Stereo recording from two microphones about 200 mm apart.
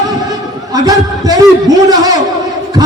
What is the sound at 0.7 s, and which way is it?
A man's voice, 20° right (ahead or behind).